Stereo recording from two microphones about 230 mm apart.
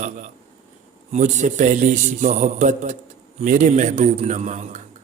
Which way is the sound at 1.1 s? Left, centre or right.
Right.